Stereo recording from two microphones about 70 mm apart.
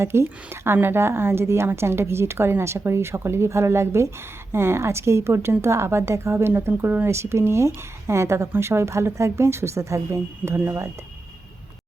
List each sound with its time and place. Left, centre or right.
0.0 s a woman's voice: right